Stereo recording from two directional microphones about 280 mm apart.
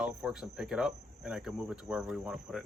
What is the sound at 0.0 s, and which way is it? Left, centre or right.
Cricket, centre.